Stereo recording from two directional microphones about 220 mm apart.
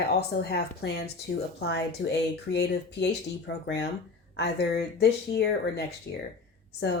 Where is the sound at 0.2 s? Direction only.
45° left (ahead or behind).